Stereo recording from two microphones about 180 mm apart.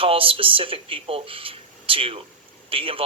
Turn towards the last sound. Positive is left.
turn(degrees=-30)  # may be behind; listen again after turning